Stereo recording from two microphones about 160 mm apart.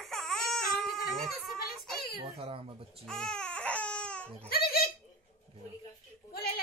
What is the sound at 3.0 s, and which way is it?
Baby cry, 5° left (ahead or behind).